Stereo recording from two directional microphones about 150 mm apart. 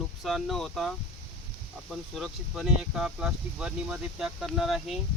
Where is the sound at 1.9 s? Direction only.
Centre (ahead or behind).